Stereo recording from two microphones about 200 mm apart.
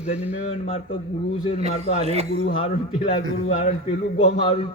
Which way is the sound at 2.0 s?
30° right (ahead or behind).